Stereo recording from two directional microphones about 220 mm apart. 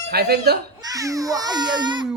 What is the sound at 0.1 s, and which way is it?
Speech, 45° right (ahead or behind).